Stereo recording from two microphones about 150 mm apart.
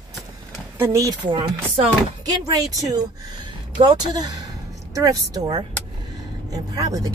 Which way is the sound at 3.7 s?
30° right (ahead or behind).